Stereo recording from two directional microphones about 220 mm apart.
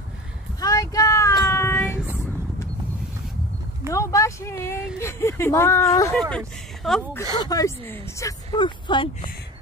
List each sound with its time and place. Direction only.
0.6 s child singing: 15° left (ahead or behind)
1.9 s a sound: 5° right (ahead or behind)
3.9 s speech: 15° left (ahead or behind)
6.3 s speech: centre (ahead or behind)
7.3 s speech: 15° left (ahead or behind)